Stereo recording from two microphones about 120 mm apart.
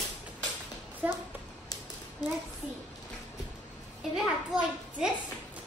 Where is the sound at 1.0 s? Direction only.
15° right (ahead or behind).